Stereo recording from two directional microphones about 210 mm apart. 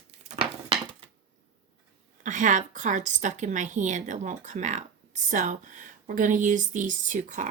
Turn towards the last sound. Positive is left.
turn(degrees=-35)  # may be behind; listen again after turning